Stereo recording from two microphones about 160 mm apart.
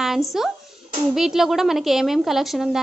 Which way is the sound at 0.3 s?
Centre (ahead or behind).